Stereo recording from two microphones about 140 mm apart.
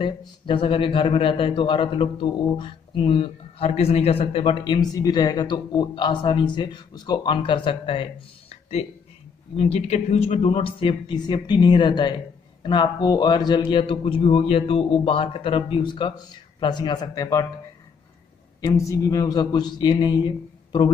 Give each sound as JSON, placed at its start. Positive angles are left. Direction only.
{"t": 0.0, "sound": "a man's voice", "side_deg": 35}
{"t": 18.7, "sound": "a man's voice", "side_deg": 20}